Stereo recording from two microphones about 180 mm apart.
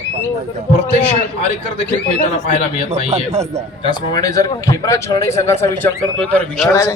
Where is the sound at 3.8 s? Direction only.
20° left (ahead or behind).